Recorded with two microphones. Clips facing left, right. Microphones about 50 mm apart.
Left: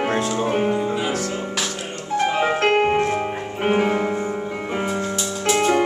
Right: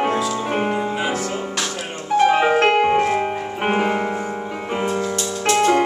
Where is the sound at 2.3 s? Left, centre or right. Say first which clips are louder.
Right 2 dB; right.